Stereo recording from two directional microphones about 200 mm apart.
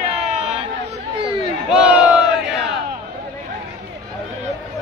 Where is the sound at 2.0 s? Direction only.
5° right (ahead or behind).